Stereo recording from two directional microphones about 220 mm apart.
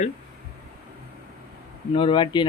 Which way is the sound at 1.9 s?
20° left (ahead or behind).